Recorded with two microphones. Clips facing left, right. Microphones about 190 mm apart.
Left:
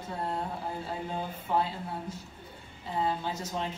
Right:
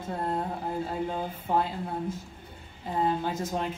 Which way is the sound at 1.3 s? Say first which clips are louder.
Right 2 dB; 50° right (ahead or behind).